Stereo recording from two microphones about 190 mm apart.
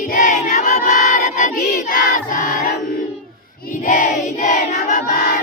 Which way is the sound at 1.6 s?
45° left (ahead or behind).